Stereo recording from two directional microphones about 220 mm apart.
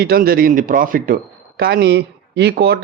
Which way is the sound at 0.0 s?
45° right (ahead or behind).